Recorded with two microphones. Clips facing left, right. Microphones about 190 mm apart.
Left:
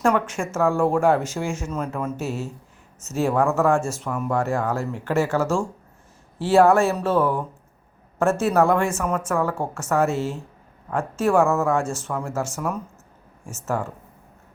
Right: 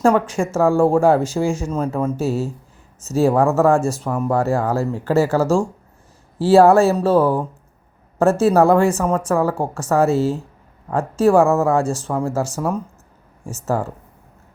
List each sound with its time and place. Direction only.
0.0 s speech: 35° right (ahead or behind)